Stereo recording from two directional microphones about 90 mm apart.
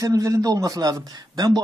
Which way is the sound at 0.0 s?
40° right (ahead or behind).